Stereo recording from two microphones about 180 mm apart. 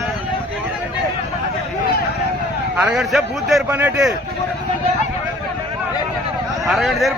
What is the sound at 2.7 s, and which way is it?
A man's voice, 5° right (ahead or behind).